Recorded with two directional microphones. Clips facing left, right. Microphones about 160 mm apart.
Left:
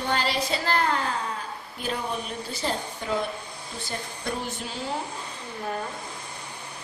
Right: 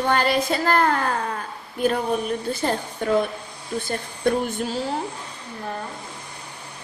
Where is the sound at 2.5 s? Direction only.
55° right (ahead or behind).